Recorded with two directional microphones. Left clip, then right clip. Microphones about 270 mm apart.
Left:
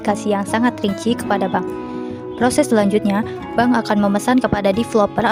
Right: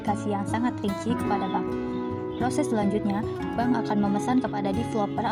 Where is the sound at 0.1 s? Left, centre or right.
Left.